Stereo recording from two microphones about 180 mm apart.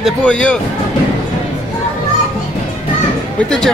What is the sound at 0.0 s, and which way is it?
Speech, 5° left (ahead or behind).